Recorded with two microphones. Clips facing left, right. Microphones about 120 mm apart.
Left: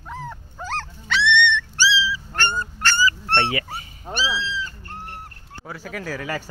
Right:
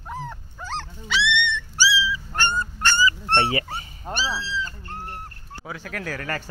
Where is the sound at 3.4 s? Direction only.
35° right (ahead or behind).